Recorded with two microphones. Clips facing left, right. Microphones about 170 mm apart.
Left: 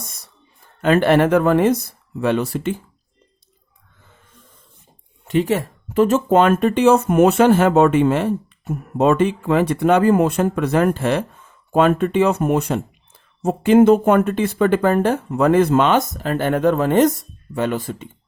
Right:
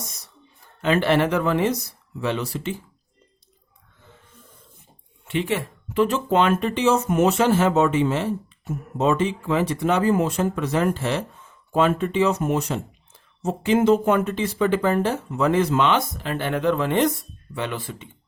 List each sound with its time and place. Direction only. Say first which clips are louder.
0.8 s speech: left 5 dB; 50° left (ahead or behind)
5.2 s speech: left 6 dB; 40° left (ahead or behind)